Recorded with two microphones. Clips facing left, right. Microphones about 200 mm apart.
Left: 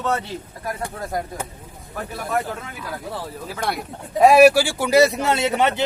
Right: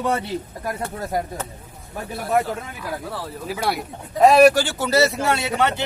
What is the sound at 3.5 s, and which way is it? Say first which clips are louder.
Speech: right 3 dB; 5° right (ahead or behind).